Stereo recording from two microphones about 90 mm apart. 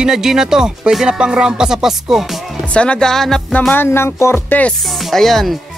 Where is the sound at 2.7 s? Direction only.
10° left (ahead or behind).